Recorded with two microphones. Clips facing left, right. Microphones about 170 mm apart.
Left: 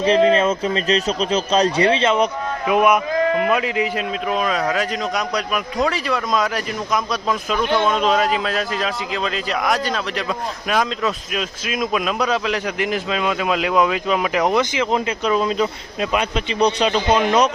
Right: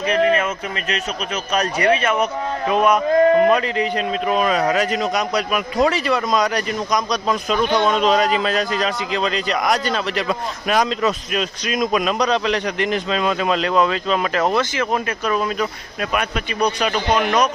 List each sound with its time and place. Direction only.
0.0 s a man's voice: 25° left (ahead or behind); by 3.0 s 10° left (ahead or behind)
3.2 s a man's voice: 35° right (ahead or behind)
3.5 s a man's voice: 5° left (ahead or behind)
7.6 s speech: 20° right (ahead or behind)
7.9 s a man's voice: centre (ahead or behind); by 17.5 s 25° left (ahead or behind)